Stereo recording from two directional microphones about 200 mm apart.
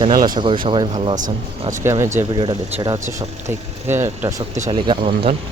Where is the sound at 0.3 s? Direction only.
25° right (ahead or behind).